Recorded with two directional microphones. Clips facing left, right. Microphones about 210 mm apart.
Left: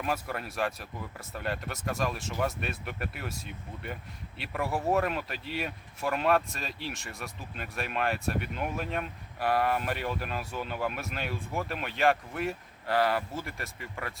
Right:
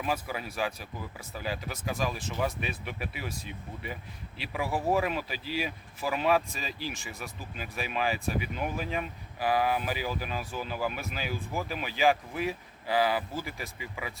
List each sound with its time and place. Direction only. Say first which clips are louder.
0.0 s speech: even; centre (ahead or behind)